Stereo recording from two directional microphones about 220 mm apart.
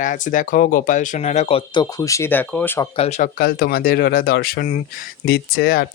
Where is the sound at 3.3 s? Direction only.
45° left (ahead or behind).